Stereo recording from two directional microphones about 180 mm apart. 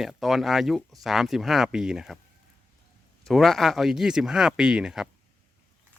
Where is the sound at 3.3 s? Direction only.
Centre (ahead or behind).